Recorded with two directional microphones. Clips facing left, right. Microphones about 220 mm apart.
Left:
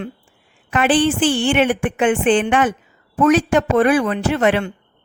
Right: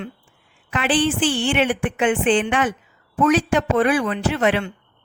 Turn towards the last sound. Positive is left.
turn(degrees=45)  # may be behind; listen again after turning